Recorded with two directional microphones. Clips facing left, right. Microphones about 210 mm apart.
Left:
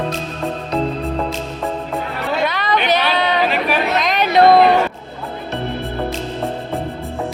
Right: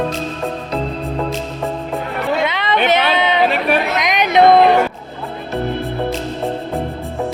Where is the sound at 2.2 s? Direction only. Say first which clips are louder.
Right 1 dB; 20° right (ahead or behind).